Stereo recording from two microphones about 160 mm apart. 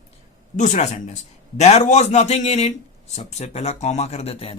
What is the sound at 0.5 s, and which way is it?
Speech, 50° left (ahead or behind).